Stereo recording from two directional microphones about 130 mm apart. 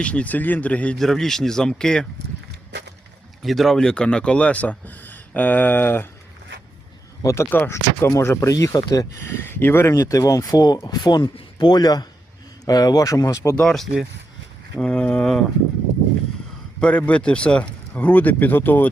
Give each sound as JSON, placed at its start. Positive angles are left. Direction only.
{"t": 0.0, "sound": "speech", "side_deg": 10}
{"t": 3.4, "sound": "speech", "side_deg": 0}
{"t": 7.2, "sound": "speech", "side_deg": 20}
{"t": 13.6, "sound": "speech", "side_deg": 5}
{"t": 16.8, "sound": "speech", "side_deg": 10}